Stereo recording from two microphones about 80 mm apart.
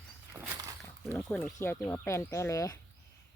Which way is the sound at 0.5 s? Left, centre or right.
Right.